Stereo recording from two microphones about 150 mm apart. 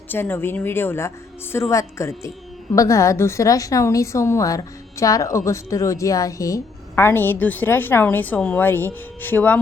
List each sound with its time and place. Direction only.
0.1 s a woman's voice: 15° left (ahead or behind)